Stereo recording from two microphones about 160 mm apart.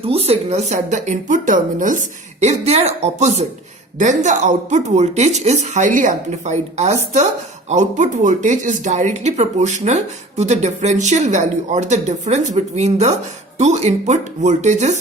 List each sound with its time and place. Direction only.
0.0 s speech: 40° right (ahead or behind)